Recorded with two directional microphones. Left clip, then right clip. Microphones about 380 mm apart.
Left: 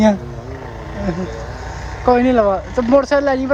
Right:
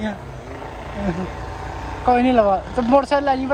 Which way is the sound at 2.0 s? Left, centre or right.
Centre.